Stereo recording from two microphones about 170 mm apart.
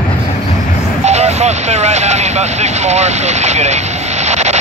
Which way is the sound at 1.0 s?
40° right (ahead or behind).